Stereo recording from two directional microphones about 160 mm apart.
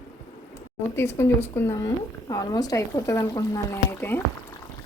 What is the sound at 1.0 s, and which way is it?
Speech, 15° left (ahead or behind).